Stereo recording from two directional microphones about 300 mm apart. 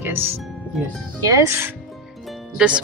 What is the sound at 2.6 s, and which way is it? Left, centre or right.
Speech, centre.